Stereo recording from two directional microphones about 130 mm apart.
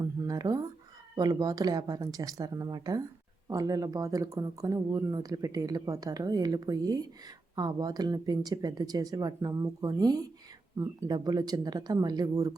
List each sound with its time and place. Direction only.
0.0 s speech: 25° right (ahead or behind)